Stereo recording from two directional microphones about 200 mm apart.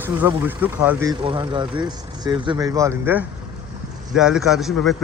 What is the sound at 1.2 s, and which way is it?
Speech, 25° right (ahead or behind).